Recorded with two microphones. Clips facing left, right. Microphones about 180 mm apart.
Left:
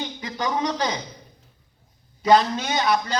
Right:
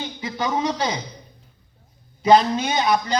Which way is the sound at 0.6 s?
10° right (ahead or behind).